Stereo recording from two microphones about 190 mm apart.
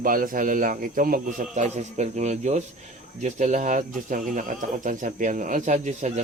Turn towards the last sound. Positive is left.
turn(degrees=-35)  # may be behind; listen again after turning